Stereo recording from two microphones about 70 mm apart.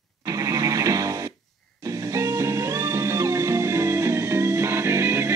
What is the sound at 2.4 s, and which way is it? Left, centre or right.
Music, right.